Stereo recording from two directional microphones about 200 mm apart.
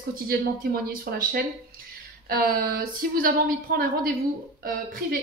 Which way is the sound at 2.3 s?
45° right (ahead or behind).